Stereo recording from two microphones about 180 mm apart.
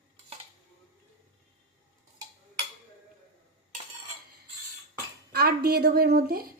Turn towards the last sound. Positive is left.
turn(degrees=-55)  # may be behind; listen again after turning